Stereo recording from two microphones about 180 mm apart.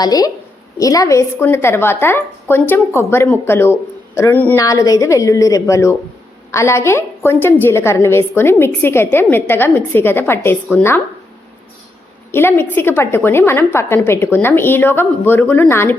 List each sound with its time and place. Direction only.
0.0 s a woman's voice: 20° left (ahead or behind)
12.3 s a woman's voice: 10° left (ahead or behind)